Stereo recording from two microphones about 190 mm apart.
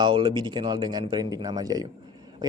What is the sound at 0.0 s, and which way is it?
Speech, 25° right (ahead or behind).